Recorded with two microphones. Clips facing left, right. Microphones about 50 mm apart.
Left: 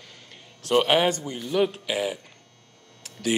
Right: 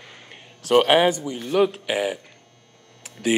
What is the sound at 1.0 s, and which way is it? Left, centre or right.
A man's voice, centre.